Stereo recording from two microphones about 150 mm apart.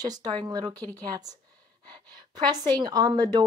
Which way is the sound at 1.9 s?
25° right (ahead or behind).